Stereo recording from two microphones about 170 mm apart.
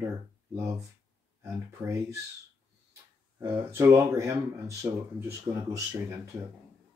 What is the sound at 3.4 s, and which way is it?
Speech, 15° right (ahead or behind).